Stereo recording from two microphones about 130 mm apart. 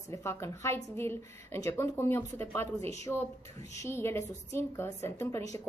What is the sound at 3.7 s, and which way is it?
A woman's voice, 20° left (ahead or behind).